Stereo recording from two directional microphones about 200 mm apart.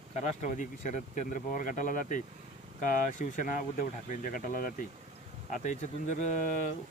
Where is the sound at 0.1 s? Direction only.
35° left (ahead or behind).